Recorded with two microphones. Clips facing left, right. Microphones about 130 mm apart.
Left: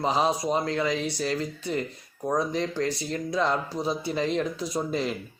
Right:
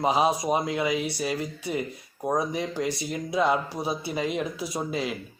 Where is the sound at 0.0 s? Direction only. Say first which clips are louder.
Right 1 dB; 10° right (ahead or behind).